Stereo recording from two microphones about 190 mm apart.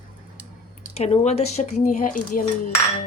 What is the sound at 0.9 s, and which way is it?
Speech, 35° left (ahead or behind).